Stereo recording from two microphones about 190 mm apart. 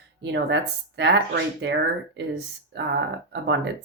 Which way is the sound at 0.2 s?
65° right (ahead or behind).